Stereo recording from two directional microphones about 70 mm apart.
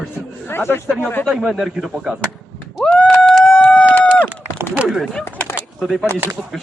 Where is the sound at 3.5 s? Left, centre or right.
Centre.